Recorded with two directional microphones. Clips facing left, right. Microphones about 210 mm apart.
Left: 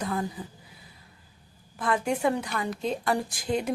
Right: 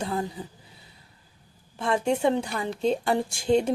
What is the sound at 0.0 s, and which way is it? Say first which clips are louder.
Speech: right 1 dB; 25° right (ahead or behind).